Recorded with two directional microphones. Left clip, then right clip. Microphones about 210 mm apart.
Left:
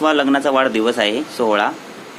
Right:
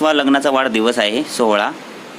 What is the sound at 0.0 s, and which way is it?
Speech, 20° right (ahead or behind).